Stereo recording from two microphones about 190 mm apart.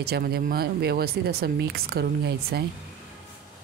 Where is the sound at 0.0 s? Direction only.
55° right (ahead or behind).